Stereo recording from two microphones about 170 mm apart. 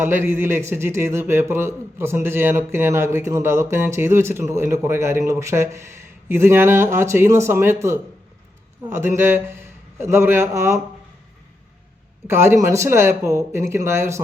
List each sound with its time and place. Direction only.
0.0 s a man's voice: 15° right (ahead or behind)
12.3 s speech: 15° right (ahead or behind)